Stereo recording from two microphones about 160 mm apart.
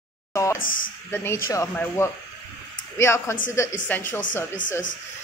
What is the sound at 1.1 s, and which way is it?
A woman's voice, 15° left (ahead or behind).